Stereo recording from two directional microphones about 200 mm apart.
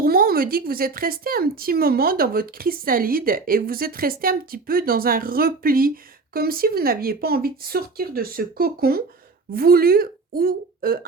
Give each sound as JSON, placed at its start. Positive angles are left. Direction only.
{"t": 0.0, "sound": "a woman's voice", "side_deg": -50}